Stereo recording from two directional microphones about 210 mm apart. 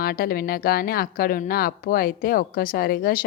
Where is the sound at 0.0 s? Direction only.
45° left (ahead or behind).